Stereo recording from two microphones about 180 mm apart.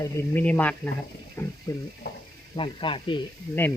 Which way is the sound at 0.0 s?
10° left (ahead or behind).